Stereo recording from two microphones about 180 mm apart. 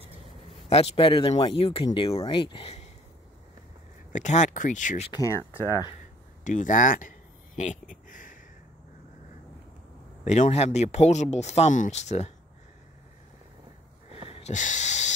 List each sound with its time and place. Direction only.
0.7 s speech: 35° left (ahead or behind)
4.1 s speech: 40° left (ahead or behind)
5.1 s speech: 20° left (ahead or behind)
6.4 s speech: 45° left (ahead or behind)
7.9 s a sound: 45° left (ahead or behind)
10.2 s speech: 40° left (ahead or behind)
14.3 s owl: 40° left (ahead or behind)